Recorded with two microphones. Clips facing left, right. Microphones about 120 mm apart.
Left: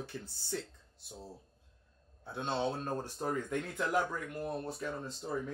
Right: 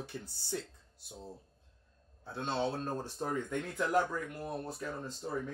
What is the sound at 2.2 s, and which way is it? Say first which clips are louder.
Speech: even; 15° left (ahead or behind).